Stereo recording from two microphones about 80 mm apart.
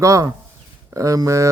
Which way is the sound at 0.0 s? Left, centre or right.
Right.